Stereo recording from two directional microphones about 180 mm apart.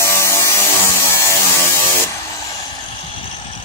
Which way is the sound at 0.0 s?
15° left (ahead or behind).